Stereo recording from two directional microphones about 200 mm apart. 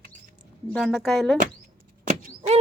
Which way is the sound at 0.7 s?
Centre (ahead or behind).